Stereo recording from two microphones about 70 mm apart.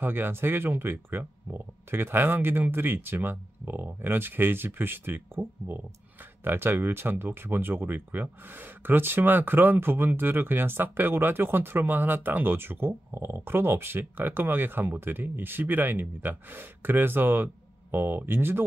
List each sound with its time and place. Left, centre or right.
0.0 s speech: right